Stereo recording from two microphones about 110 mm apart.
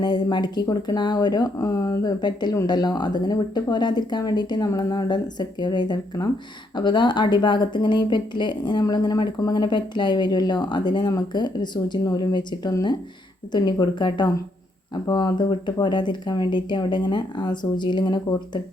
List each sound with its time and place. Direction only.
0.0 s speech: 40° left (ahead or behind)